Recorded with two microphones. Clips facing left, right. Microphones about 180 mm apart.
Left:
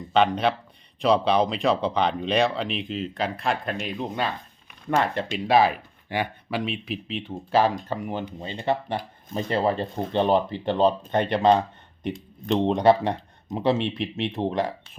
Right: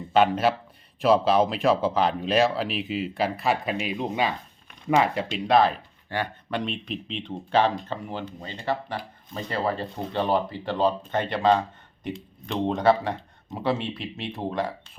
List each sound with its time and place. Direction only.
0.0 s speech: 5° right (ahead or behind)
5.5 s speech: 5° left (ahead or behind)